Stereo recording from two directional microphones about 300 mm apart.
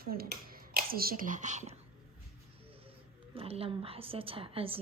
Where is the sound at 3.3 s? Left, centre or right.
Centre.